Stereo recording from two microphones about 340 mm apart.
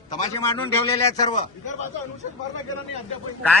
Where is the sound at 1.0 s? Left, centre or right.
Centre.